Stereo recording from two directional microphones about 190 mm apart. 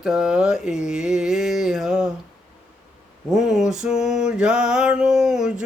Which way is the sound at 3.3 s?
Centre (ahead or behind).